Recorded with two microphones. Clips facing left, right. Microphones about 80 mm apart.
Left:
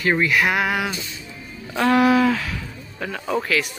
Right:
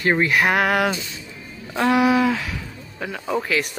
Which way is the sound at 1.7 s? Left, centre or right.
Centre.